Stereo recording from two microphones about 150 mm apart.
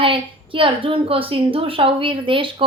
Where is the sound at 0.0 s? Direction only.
35° right (ahead or behind).